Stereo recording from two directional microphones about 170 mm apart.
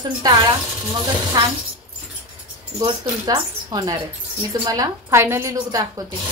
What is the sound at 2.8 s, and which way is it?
A woman's voice, 25° right (ahead or behind).